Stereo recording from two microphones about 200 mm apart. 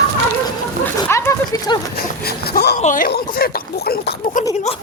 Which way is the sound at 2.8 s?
40° left (ahead or behind).